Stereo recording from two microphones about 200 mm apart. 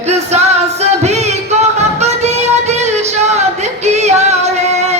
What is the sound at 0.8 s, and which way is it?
Music, 35° right (ahead or behind).